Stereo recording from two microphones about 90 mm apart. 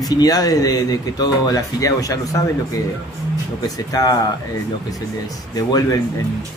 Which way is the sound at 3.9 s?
45° left (ahead or behind).